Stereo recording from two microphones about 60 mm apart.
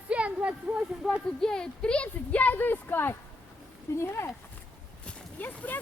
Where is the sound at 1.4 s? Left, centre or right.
Centre; by 4.3 s left.